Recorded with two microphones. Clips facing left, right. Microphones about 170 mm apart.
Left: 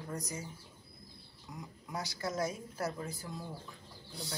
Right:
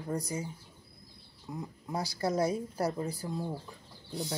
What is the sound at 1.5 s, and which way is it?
Speech, 30° right (ahead or behind).